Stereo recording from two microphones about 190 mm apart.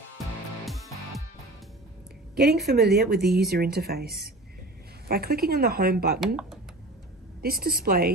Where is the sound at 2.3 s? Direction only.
60° right (ahead or behind).